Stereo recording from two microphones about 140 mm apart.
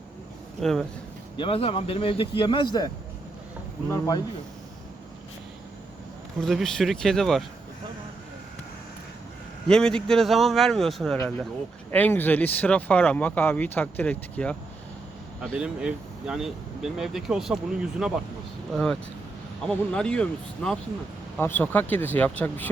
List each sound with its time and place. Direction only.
0.6 s speech: 5° left (ahead or behind)
1.4 s speech: 40° left (ahead or behind); by 4.2 s 20° left (ahead or behind)
6.4 s speech: centre (ahead or behind)
9.6 s speech: 5° left (ahead or behind)
11.9 s speech: 15° left (ahead or behind)
15.5 s speech: 5° right (ahead or behind); by 22.7 s 15° left (ahead or behind)